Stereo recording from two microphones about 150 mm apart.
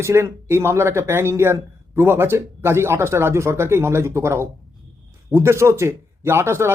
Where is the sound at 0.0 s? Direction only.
15° right (ahead or behind).